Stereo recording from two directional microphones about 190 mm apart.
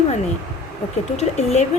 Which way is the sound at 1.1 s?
35° left (ahead or behind).